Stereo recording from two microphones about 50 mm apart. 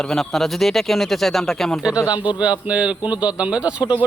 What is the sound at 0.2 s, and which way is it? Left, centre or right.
Speech, centre.